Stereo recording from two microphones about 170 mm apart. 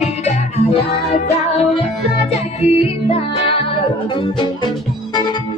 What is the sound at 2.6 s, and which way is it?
Music, 35° left (ahead or behind).